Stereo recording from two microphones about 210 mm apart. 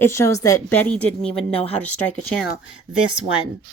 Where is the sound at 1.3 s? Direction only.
25° left (ahead or behind).